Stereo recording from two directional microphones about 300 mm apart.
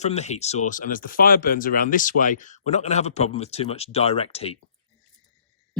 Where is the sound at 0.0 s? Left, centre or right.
Left.